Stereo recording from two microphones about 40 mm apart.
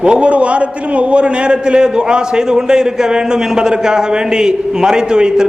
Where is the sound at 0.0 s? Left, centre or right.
Right.